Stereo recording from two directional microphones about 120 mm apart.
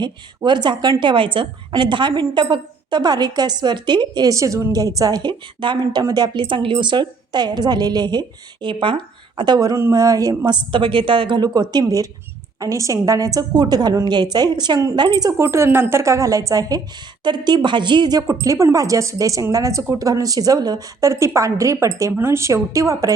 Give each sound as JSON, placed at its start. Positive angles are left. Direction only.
{"t": 0.0, "sound": "a woman's voice", "side_deg": -40}